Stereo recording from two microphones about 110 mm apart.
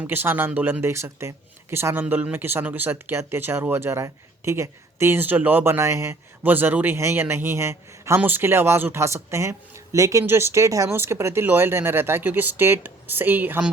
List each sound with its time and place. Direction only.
0.0 s speech: 20° right (ahead or behind)